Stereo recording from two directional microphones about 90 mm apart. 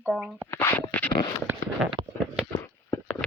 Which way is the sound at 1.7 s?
5° right (ahead or behind).